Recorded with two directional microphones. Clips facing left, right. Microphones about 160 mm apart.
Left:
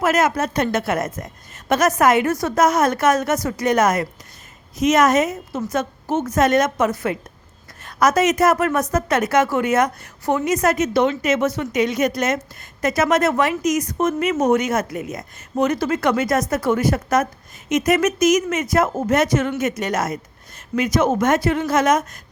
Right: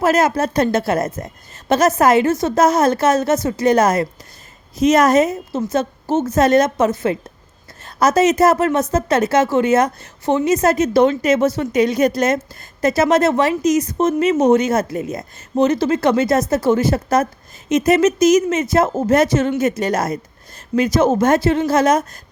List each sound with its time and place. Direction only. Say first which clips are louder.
0.0 s a woman's voice: right 3 dB; 30° right (ahead or behind)